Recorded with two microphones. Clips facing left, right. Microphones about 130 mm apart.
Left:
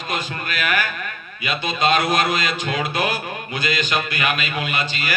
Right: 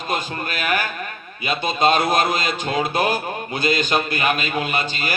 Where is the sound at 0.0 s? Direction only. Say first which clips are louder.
Right 2 dB; 40° right (ahead or behind).